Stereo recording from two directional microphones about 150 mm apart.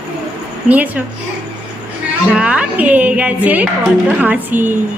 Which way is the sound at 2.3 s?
5° right (ahead or behind).